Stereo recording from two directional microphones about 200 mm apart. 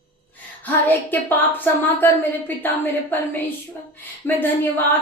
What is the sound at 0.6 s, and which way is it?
A woman's voice, 10° left (ahead or behind).